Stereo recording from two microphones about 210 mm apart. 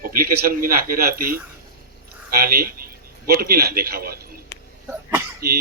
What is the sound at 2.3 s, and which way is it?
A man's voice, 45° right (ahead or behind).